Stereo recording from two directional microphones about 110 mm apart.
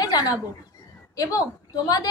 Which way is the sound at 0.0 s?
35° left (ahead or behind).